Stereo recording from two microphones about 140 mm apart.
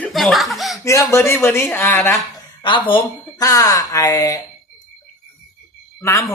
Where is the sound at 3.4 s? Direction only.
25° left (ahead or behind).